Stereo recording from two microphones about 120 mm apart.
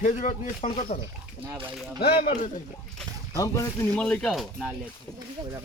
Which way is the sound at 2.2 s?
70° left (ahead or behind).